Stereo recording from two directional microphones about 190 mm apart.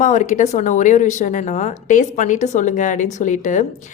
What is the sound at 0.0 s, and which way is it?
Speech, 40° left (ahead or behind).